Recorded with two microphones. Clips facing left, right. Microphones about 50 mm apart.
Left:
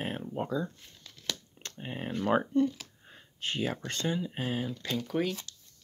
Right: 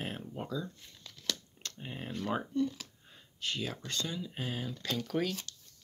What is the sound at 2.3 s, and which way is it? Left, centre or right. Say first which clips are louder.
Speech: left 6 dB; left.